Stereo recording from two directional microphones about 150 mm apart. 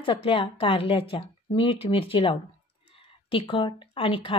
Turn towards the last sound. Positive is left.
turn(degrees=35)  # may be behind; listen again after turning